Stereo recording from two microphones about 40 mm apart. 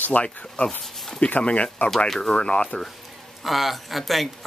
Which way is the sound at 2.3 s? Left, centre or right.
Left.